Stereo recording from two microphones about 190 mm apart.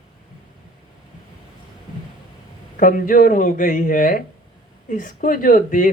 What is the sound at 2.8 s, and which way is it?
Speech, 45° left (ahead or behind).